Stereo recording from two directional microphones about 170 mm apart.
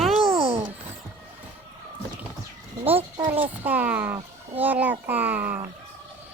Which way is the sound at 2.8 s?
35° right (ahead or behind).